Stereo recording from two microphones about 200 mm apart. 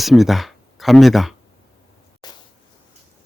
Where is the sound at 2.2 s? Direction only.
20° left (ahead or behind).